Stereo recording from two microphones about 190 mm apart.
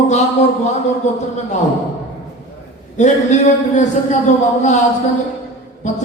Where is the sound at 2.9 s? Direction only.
40° left (ahead or behind).